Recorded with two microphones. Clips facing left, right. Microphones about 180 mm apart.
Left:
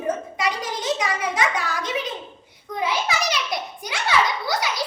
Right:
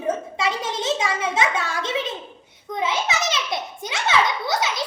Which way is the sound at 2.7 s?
20° right (ahead or behind).